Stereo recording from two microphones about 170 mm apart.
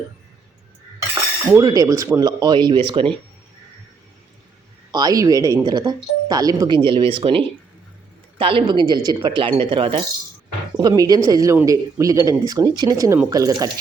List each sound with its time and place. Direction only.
1.5 s speech: 20° right (ahead or behind)
4.9 s speech: 25° right (ahead or behind)
10.8 s speech: 20° right (ahead or behind)